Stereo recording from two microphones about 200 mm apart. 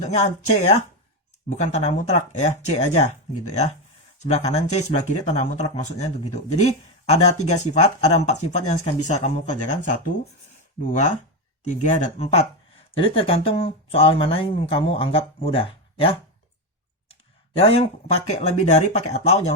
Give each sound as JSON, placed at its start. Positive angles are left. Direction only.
{"t": 0.0, "sound": "speech", "side_deg": 35}